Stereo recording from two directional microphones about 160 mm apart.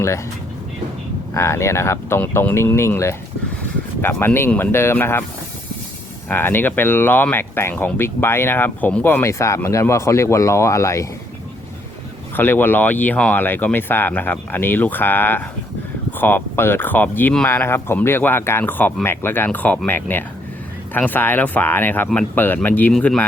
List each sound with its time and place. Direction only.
1.3 s speech: 20° left (ahead or behind)
6.2 s speech: 10° left (ahead or behind)
12.4 s speech: 10° left (ahead or behind)